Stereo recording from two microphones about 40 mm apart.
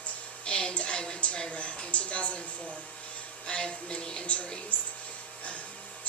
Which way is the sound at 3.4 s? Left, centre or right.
Left.